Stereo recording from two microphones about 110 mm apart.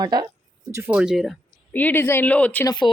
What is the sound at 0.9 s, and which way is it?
Speech, 10° right (ahead or behind).